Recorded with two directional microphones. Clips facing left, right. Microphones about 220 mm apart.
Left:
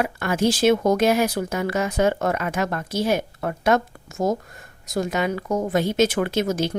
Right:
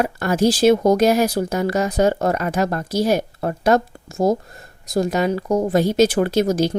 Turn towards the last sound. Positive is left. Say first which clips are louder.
# right 5 dB
turn(degrees=-35)  # may be behind; listen again after turning